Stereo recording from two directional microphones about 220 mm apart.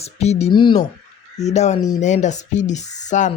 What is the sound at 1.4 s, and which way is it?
Speech, 30° left (ahead or behind).